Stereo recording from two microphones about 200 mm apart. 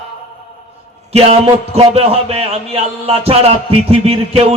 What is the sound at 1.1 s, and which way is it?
A man's voice, 30° right (ahead or behind).